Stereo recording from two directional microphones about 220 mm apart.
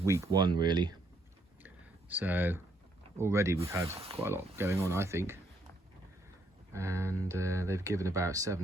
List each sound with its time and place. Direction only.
0.0 s speech: 15° right (ahead or behind)
1.6 s a sound: 10° right (ahead or behind)
3.2 s speech: 10° right (ahead or behind)
6.7 s speech: 15° right (ahead or behind)